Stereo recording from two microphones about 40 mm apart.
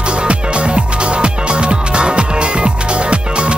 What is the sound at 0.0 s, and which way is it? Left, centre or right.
Music, right.